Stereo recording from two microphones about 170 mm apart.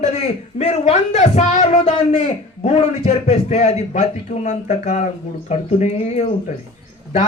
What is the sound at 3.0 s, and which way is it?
A man's voice, 40° left (ahead or behind).